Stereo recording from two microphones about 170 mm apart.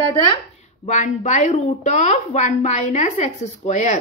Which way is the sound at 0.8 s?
45° left (ahead or behind).